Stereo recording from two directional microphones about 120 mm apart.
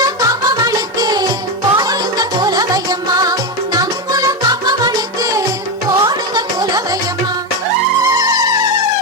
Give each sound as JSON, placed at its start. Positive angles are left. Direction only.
{"t": 0.0, "sound": "music", "side_deg": -30}
{"t": 8.0, "sound": "music", "side_deg": -30}